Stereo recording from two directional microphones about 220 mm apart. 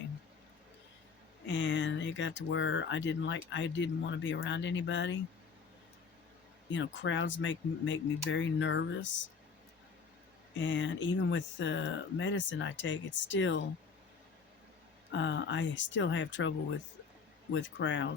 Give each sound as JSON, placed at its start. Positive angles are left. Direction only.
{"t": 1.5, "sound": "speech", "side_deg": 55}
{"t": 6.7, "sound": "speech", "side_deg": 55}
{"t": 10.6, "sound": "speech", "side_deg": 55}
{"t": 15.1, "sound": "speech", "side_deg": 55}
{"t": 17.5, "sound": "speech", "side_deg": 55}